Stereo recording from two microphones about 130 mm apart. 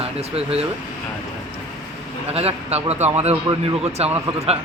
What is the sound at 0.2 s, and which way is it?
Speech, 50° right (ahead or behind).